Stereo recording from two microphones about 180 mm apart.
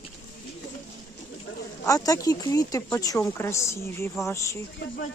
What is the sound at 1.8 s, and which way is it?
Speech, 20° left (ahead or behind).